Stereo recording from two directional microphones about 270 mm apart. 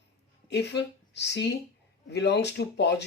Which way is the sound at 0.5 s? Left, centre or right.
Left.